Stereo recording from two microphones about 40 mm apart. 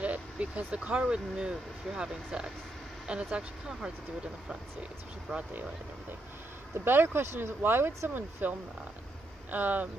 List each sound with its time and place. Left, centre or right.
0.0 s vehicle: right
0.8 s speech: right
5.5 s speech: right
6.8 s speech: right